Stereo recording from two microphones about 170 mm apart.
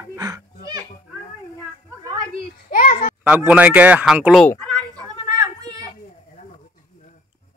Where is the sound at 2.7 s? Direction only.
55° left (ahead or behind).